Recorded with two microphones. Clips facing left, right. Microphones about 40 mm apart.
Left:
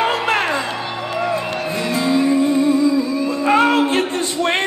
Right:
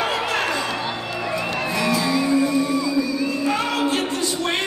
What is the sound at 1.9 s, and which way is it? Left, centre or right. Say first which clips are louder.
Music: left 4 dB; left.